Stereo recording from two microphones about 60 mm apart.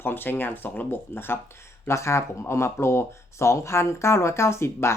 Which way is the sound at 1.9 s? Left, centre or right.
Left.